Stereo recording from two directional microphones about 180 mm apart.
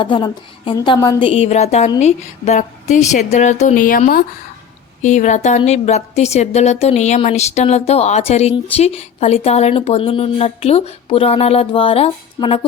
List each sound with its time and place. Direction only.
0.0 s a woman's voice: 25° left (ahead or behind)